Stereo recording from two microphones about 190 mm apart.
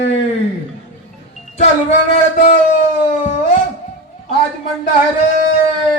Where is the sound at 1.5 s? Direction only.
35° left (ahead or behind).